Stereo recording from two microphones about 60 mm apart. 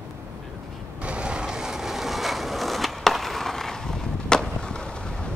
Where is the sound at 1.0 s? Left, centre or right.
Centre.